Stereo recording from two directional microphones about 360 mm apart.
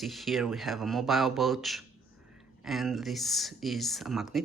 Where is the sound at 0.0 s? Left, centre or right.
Centre.